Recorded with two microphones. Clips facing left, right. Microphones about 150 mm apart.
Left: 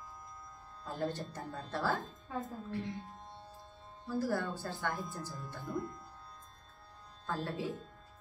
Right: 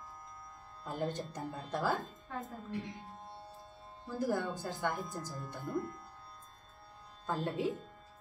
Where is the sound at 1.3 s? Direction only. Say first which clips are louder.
Right 2 dB; 15° right (ahead or behind).